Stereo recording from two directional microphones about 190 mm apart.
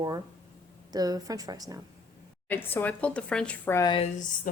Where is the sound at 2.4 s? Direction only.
10° left (ahead or behind).